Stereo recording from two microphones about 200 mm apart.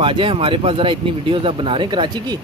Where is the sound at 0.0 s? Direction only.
25° right (ahead or behind).